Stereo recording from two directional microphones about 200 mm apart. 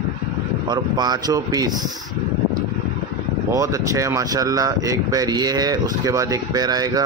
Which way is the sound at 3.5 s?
15° right (ahead or behind).